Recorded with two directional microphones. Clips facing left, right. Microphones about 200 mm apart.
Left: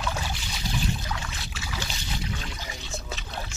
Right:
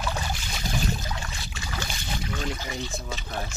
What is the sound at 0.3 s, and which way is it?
Boat, 50° right (ahead or behind).